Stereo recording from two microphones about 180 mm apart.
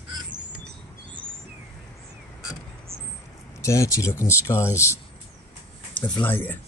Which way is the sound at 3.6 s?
15° left (ahead or behind).